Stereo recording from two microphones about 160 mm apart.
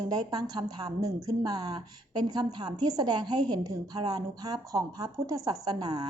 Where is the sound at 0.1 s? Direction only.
25° right (ahead or behind).